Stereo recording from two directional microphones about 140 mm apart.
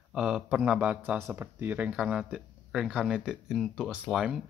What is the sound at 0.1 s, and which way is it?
Speech, 5° right (ahead or behind).